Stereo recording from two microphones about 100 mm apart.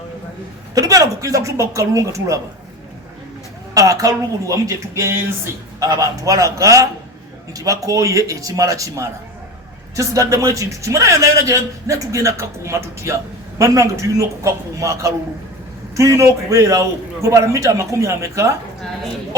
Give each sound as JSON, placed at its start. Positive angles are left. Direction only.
{"t": 0.7, "sound": "a man's voice", "side_deg": -35}
{"t": 3.8, "sound": "a man's voice", "side_deg": -35}